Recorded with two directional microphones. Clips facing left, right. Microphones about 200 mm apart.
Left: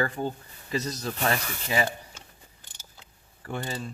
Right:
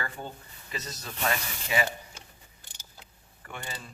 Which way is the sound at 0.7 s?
35° left (ahead or behind).